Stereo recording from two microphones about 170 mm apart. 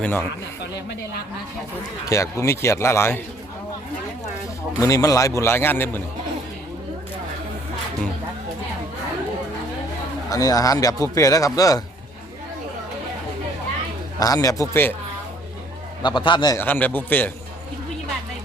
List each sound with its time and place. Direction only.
0.0 s a man's voice: 10° left (ahead or behind)
2.0 s a man's voice: 20° left (ahead or behind)
4.8 s a man's voice: 20° left (ahead or behind)
10.2 s speech: 20° left (ahead or behind)
14.2 s speech: 20° left (ahead or behind)
16.0 s speech: 25° left (ahead or behind)
16.6 s a man's voice: 10° left (ahead or behind)